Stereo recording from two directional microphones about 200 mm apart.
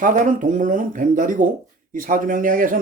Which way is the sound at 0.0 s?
40° right (ahead or behind).